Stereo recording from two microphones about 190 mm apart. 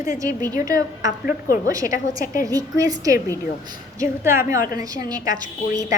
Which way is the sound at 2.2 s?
45° left (ahead or behind).